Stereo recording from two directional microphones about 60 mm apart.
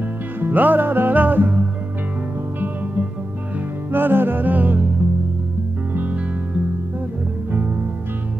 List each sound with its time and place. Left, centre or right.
0.4 s music: right
3.9 s music: right
7.5 s music: right